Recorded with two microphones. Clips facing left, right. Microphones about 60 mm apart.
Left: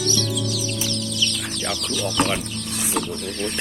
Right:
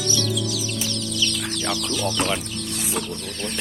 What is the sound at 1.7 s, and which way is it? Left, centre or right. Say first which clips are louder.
Speech: left 2 dB; centre.